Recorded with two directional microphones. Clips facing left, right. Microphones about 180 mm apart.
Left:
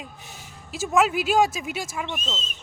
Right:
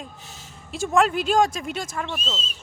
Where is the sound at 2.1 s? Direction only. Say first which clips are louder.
Right 1 dB; 20° left (ahead or behind).